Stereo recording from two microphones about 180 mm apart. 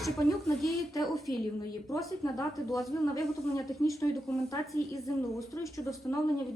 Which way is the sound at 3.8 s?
15° left (ahead or behind).